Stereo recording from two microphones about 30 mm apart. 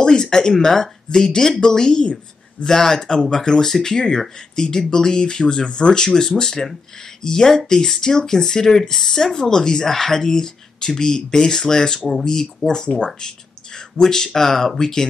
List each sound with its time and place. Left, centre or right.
0.0 s speech: left
12.8 s speech: left
13.7 s speech: centre